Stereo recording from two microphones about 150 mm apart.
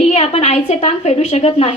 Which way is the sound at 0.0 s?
45° left (ahead or behind).